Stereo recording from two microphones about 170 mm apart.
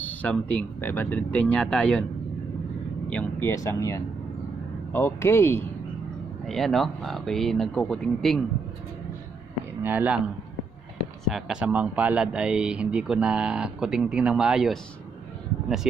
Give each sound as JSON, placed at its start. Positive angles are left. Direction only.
{"t": 0.0, "sound": "speech", "side_deg": 10}
{"t": 3.1, "sound": "speech", "side_deg": 10}
{"t": 3.5, "sound": "speech", "side_deg": 20}
{"t": 6.4, "sound": "speech", "side_deg": 0}
{"t": 9.8, "sound": "speech", "side_deg": -10}
{"t": 11.3, "sound": "speech", "side_deg": 0}